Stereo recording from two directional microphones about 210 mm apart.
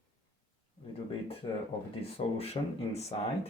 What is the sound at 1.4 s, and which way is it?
Speech, 20° left (ahead or behind).